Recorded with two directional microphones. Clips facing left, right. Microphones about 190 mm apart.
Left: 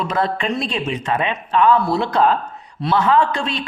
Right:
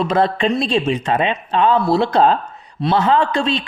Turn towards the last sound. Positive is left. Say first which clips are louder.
# right 1 dB
turn(degrees=-30)  # may be behind; listen again after turning